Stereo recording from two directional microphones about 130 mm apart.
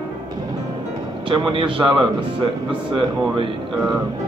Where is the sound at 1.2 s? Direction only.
40° right (ahead or behind).